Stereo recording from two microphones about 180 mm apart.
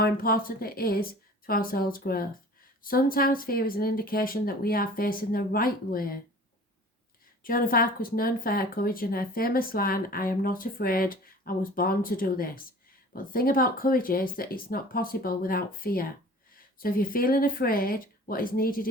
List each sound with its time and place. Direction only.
0.0 s a woman's voice: 55° left (ahead or behind)
7.4 s speech: 50° left (ahead or behind)